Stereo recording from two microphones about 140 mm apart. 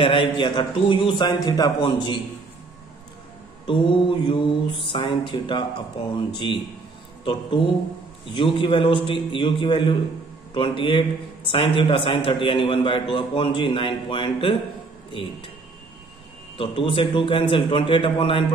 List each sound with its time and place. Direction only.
0.0 s a man's voice: 35° left (ahead or behind)
3.6 s a man's voice: 35° left (ahead or behind)
8.3 s a man's voice: 35° left (ahead or behind)
16.5 s a man's voice: 40° left (ahead or behind)